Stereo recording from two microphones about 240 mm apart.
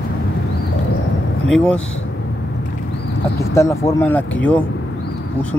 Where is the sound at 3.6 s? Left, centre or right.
Centre.